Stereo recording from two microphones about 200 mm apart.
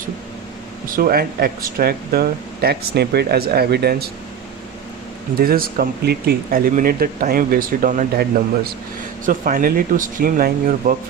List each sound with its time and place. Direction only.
0.9 s speech: 45° right (ahead or behind)
5.4 s speech: 45° right (ahead or behind)